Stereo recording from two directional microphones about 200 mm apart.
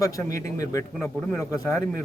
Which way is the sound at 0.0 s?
15° left (ahead or behind).